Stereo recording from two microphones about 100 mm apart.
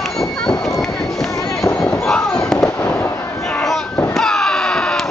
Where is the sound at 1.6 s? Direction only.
10° left (ahead or behind).